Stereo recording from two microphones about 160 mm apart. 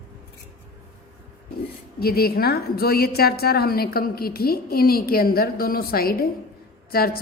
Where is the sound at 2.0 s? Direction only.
70° left (ahead or behind).